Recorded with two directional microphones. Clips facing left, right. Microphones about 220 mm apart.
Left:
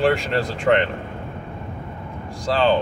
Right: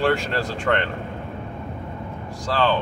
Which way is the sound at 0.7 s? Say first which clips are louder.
Left 5 dB; 20° left (ahead or behind).